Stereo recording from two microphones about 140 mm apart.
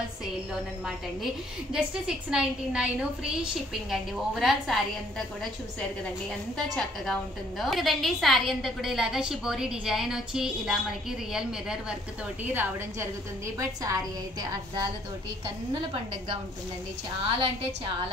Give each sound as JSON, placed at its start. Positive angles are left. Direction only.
{"t": 1.7, "sound": "a woman's voice", "side_deg": -5}
{"t": 3.9, "sound": "a woman's voice", "side_deg": 0}
{"t": 6.5, "sound": "a woman's voice", "side_deg": 5}
{"t": 12.5, "sound": "a woman's voice", "side_deg": -15}
{"t": 17.3, "sound": "a woman's voice", "side_deg": -40}